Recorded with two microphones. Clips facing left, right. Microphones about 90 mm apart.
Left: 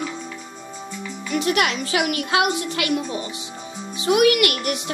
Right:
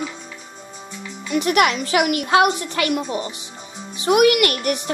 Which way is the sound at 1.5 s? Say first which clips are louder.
Right 4 dB; 40° right (ahead or behind).